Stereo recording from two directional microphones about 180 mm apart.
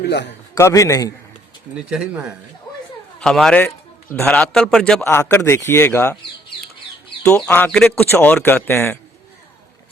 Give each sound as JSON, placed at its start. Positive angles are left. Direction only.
{"t": 0.0, "sound": "a man's voice", "side_deg": 70}
{"t": 0.5, "sound": "a man's voice", "side_deg": 15}
{"t": 1.7, "sound": "a man's voice", "side_deg": -5}
{"t": 7.3, "sound": "a man's voice", "side_deg": 5}